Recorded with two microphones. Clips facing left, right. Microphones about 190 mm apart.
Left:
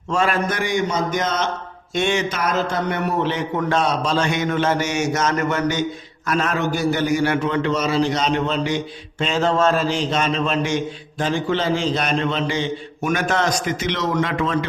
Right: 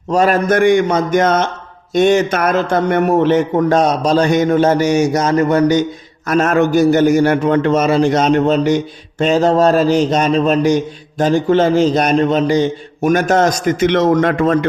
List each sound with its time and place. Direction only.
0.1 s a man's voice: 40° right (ahead or behind)
1.9 s a man's voice: 40° right (ahead or behind)